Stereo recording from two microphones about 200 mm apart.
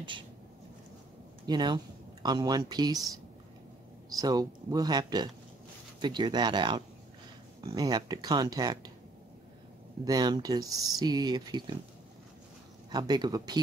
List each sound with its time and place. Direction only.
1.4 s speech: 20° right (ahead or behind)
4.2 s speech: 20° right (ahead or behind)
10.0 s speech: 20° right (ahead or behind)
12.9 s speech: 20° right (ahead or behind)